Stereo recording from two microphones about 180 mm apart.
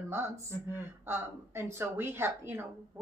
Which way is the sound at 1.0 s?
15° right (ahead or behind).